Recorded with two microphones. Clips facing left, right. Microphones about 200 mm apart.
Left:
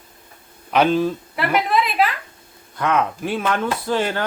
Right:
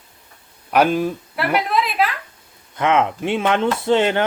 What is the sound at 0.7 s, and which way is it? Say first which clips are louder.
Speech: even; 10° right (ahead or behind).